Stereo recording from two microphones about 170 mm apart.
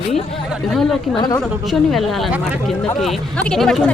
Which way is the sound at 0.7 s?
5° left (ahead or behind).